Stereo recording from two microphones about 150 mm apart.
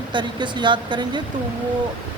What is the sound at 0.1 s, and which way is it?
Speech, 30° right (ahead or behind).